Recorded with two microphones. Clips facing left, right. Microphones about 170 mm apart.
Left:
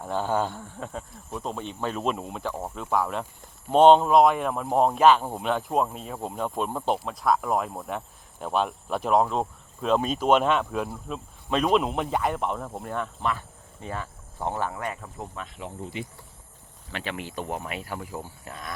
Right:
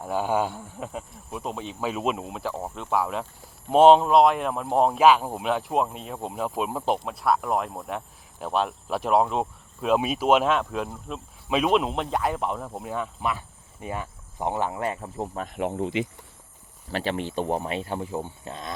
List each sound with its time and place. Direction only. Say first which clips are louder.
0.0 s speech: right 1 dB; 10° right (ahead or behind); by 15.3 s 30° right (ahead or behind)
15.4 s speech: right 11 dB; 55° right (ahead or behind); by 16.0 s 90° right
16.9 s speech: right 6 dB; 35° right (ahead or behind)